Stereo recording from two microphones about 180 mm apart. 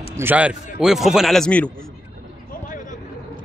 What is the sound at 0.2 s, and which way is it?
A man's voice, 10° right (ahead or behind).